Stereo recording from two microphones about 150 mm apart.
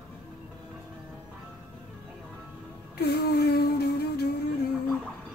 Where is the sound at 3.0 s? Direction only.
90° left.